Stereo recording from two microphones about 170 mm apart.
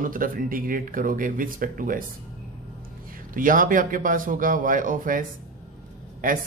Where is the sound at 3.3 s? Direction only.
55° right (ahead or behind).